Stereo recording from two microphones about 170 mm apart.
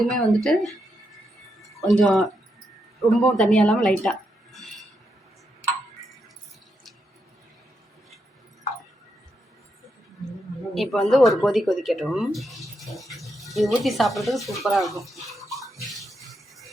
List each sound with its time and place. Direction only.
0.0 s speech: centre (ahead or behind)
1.8 s speech: centre (ahead or behind)
10.8 s speech: centre (ahead or behind)
16.3 s music: centre (ahead or behind)